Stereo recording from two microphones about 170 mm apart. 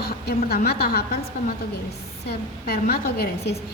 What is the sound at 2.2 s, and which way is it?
A woman's voice, 65° left (ahead or behind).